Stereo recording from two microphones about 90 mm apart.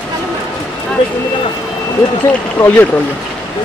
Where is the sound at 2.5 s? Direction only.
25° left (ahead or behind).